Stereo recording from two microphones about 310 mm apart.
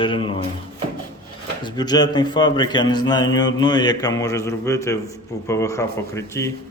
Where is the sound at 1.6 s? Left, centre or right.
Centre.